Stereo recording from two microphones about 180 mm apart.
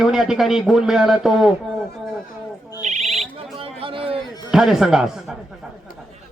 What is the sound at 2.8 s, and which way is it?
Owl, 40° right (ahead or behind).